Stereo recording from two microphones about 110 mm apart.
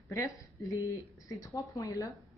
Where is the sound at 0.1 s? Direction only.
25° left (ahead or behind).